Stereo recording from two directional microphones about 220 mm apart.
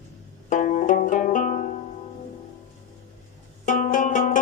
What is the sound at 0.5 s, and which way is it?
Music, 35° left (ahead or behind).